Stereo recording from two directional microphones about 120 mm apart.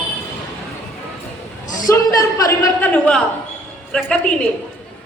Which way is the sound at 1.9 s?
30° left (ahead or behind).